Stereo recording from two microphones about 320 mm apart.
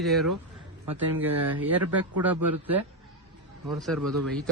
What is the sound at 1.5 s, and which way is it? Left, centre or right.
Speech, right.